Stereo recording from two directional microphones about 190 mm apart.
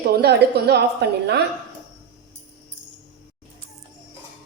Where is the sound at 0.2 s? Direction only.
60° right (ahead or behind).